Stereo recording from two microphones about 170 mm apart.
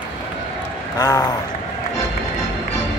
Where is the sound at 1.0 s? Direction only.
20° left (ahead or behind).